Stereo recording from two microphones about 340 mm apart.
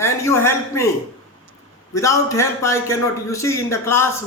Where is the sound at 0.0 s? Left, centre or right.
Centre.